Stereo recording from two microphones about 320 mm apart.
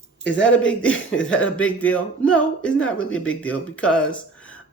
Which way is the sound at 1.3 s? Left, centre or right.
Centre.